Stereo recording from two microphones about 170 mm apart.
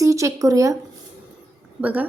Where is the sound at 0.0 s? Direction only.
20° right (ahead or behind).